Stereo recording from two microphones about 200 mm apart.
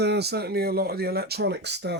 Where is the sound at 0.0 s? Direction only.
55° right (ahead or behind).